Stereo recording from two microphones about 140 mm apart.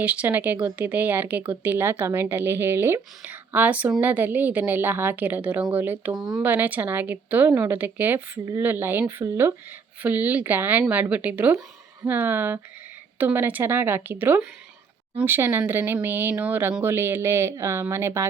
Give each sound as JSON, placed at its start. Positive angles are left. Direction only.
{"t": 0.0, "sound": "speech", "side_deg": -10}